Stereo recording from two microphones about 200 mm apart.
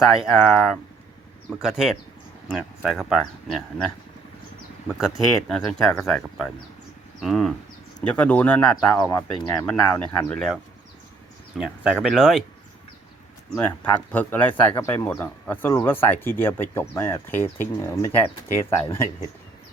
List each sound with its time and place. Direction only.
0.1 s speech: 5° right (ahead or behind)
4.9 s speech: centre (ahead or behind); by 9.5 s 20° left (ahead or behind)
9.6 s speech: 5° left (ahead or behind)
13.6 s speech: 10° left (ahead or behind)
18.7 s speech: 15° left (ahead or behind)